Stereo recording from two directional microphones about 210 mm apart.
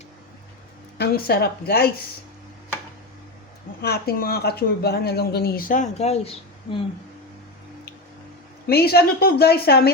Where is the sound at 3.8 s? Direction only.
45° left (ahead or behind); by 6.7 s 30° left (ahead or behind).